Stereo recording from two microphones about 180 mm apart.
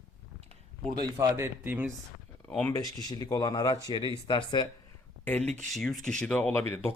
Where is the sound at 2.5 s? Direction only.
10° left (ahead or behind).